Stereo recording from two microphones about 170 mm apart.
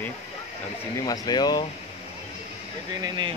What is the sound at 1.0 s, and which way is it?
Speech, 25° left (ahead or behind).